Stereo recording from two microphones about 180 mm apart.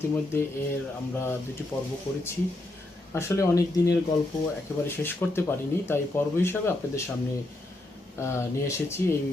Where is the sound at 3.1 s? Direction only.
15° left (ahead or behind).